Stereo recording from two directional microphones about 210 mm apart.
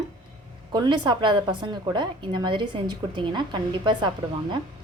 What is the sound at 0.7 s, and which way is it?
A woman's voice, 20° right (ahead or behind).